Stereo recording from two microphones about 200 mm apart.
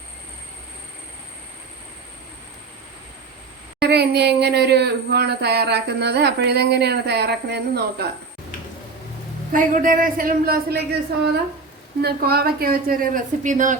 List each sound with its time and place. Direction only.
3.8 s speech: 55° right (ahead or behind)
9.5 s speech: 40° right (ahead or behind)